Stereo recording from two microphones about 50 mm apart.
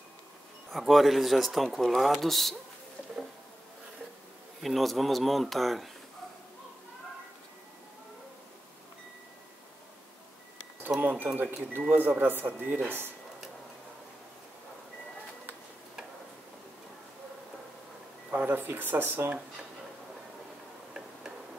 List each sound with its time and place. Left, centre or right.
0.7 s speech: centre
4.6 s speech: centre
11.0 s a sound: right
11.9 s speech: right
18.3 s speech: right